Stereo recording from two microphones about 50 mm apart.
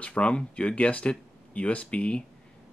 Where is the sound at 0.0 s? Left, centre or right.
Left.